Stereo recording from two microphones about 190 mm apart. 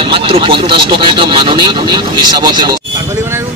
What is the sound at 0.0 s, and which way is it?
Speech, 25° right (ahead or behind).